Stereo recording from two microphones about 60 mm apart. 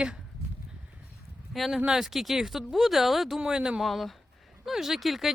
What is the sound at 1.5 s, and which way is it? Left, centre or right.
Speech, centre.